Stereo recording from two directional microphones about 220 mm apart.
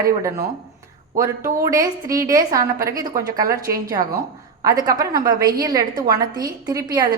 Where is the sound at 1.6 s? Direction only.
15° right (ahead or behind).